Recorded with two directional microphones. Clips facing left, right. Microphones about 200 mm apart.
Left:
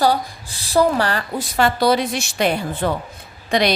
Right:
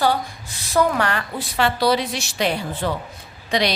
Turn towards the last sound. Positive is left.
turn(degrees=50)  # may be behind; listen again after turning